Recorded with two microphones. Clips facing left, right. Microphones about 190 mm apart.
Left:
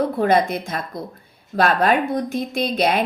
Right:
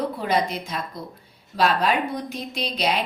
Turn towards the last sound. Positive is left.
turn(degrees=50)  # may be behind; listen again after turning